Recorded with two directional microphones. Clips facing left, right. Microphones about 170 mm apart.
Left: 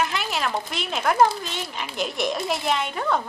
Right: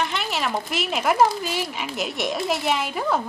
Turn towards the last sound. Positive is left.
turn(degrees=-5)  # may be behind; listen again after turning